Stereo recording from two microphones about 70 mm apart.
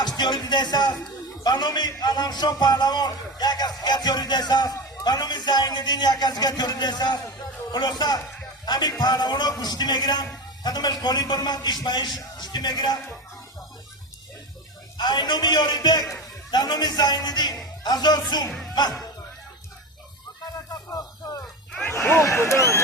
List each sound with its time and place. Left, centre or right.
0.0 s a man's voice: left
8.6 s music: left
9.0 s a man's voice: left
14.9 s a man's voice: left
21.9 s a sound: left
22.2 s speech: left